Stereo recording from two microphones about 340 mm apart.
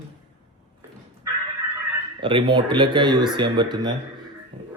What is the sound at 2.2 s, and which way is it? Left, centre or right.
Speech, centre.